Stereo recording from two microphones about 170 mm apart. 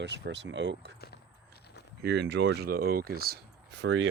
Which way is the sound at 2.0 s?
80° right.